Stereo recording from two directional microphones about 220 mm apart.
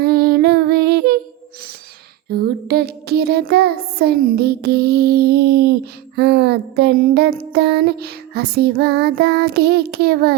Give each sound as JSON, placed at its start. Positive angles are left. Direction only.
{"t": 0.0, "sound": "music", "side_deg": -45}
{"t": 2.3, "sound": "child singing", "side_deg": -45}